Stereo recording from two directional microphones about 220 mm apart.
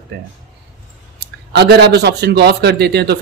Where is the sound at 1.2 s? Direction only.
45° right (ahead or behind).